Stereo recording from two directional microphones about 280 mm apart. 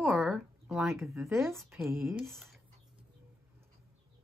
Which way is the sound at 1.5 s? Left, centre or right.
Centre.